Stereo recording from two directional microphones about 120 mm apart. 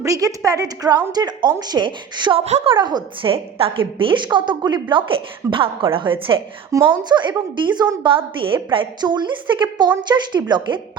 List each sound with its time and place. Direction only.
0.0 s a woman's voice: 30° right (ahead or behind)
2.4 s a woman's voice: 70° right (ahead or behind)
2.6 s a woman's voice: 40° right (ahead or behind)
6.7 s a woman's voice: 30° right (ahead or behind)
7.1 s a woman's voice: 40° right (ahead or behind)